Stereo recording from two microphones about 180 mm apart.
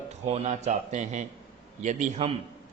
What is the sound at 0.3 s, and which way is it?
A man's voice, 35° right (ahead or behind).